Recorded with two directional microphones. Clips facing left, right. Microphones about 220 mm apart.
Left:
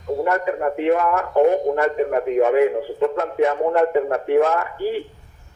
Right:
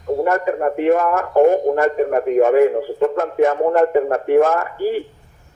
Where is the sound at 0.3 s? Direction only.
45° right (ahead or behind).